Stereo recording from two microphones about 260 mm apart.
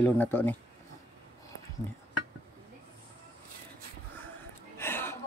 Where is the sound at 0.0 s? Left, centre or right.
Centre.